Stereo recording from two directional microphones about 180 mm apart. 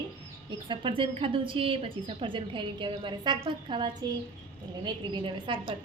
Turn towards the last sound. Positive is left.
turn(degrees=-25)  # may be behind; listen again after turning